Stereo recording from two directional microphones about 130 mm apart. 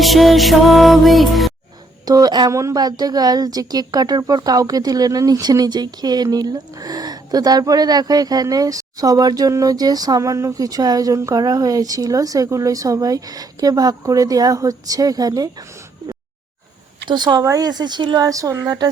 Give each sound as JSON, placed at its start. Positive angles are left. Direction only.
{"t": 0.0, "sound": "music", "side_deg": 0}
{"t": 2.0, "sound": "a woman's voice", "side_deg": -30}
{"t": 17.1, "sound": "speech", "side_deg": -35}